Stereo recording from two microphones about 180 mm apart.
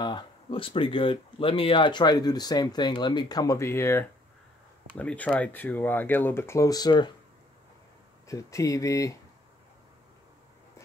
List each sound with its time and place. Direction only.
0.0 s speech: 30° left (ahead or behind)
8.3 s speech: 15° left (ahead or behind)